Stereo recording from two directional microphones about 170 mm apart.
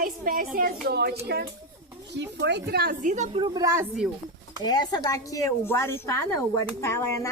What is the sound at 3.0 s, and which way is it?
Speech, 45° right (ahead or behind).